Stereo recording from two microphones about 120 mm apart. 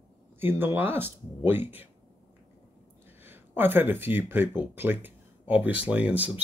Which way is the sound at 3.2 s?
15° right (ahead or behind).